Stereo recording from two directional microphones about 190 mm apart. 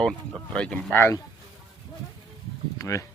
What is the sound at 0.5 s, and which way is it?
Speech, 5° left (ahead or behind).